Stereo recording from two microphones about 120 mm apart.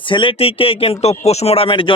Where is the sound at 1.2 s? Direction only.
65° left (ahead or behind); by 1.9 s 45° left (ahead or behind).